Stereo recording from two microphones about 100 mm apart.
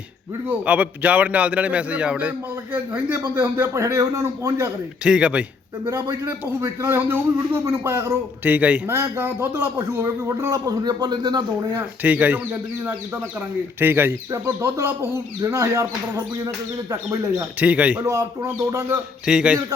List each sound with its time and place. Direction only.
0.4 s a man's voice: 15° right (ahead or behind); by 4.7 s 30° right (ahead or behind)
5.0 s a man's voice: 10° right (ahead or behind)
5.8 s speech: 25° right (ahead or behind)
8.4 s a man's voice: 15° right (ahead or behind)
8.9 s a man's voice: 25° right (ahead or behind); by 11.8 s 45° right (ahead or behind)
12.0 s a man's voice: 15° right (ahead or behind)
13.7 s a man's voice: 20° right (ahead or behind)
17.6 s a man's voice: 15° right (ahead or behind)
18.0 s speech: 30° right (ahead or behind)
19.2 s a man's voice: 10° right (ahead or behind)